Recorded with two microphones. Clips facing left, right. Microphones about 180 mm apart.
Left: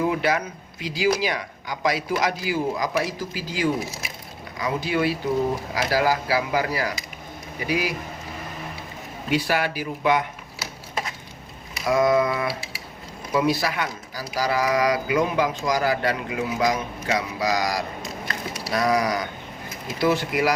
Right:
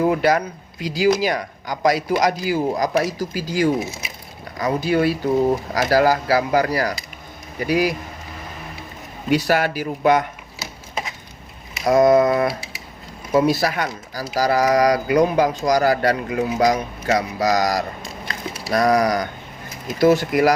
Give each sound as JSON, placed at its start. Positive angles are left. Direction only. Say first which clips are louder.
{"t": 0.0, "sound": "speech", "louder": "right 5 dB", "side_deg": -40}
{"t": 3.8, "sound": "speech", "louder": "right 4 dB", "side_deg": -20}
{"t": 4.5, "sound": "speech", "louder": "right 5 dB", "side_deg": -40}
{"t": 9.3, "sound": "speech", "louder": "right 5 dB", "side_deg": -40}
{"t": 11.9, "sound": "speech", "louder": "right 6 dB", "side_deg": -40}
{"t": 18.5, "sound": "a sound", "louder": "right 5 dB", "side_deg": -45}
{"t": 20.0, "sound": "speech", "louder": "right 6 dB", "side_deg": -45}